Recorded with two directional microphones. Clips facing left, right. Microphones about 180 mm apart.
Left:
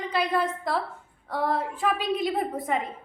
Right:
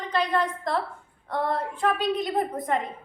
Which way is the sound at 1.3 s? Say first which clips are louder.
Even; 5° left (ahead or behind).